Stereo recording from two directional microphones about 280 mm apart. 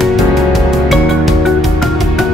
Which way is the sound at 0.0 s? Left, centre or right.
Centre.